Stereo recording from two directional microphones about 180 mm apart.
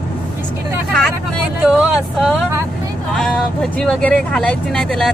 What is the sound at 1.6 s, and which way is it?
Speech, centre (ahead or behind).